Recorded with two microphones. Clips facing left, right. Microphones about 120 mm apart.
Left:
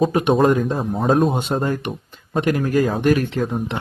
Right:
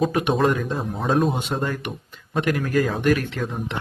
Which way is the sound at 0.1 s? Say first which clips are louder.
Left 4 dB; 30° left (ahead or behind).